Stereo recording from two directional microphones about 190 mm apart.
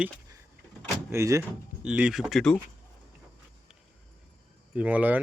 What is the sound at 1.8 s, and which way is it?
Speech, 5° right (ahead or behind).